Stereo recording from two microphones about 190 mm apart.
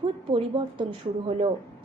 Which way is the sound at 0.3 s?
25° right (ahead or behind).